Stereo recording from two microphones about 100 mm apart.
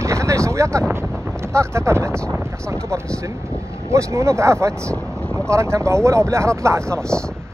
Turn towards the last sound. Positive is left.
turn(degrees=-30)  # may be behind; listen again after turning